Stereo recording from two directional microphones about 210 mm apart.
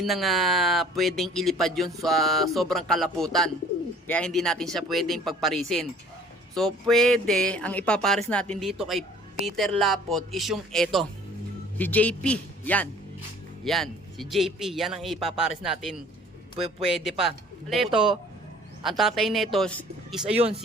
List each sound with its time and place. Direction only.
0.0 s a man's voice: centre (ahead or behind)
17.0 s speech: centre (ahead or behind)
20.3 s speech: 30° right (ahead or behind)